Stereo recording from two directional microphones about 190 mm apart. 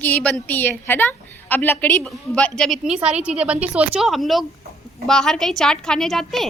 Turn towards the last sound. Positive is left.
turn(degrees=0)  # may be behind; listen again after turning